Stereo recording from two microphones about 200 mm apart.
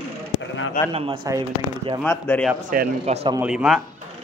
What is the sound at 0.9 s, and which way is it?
Speech, 30° right (ahead or behind).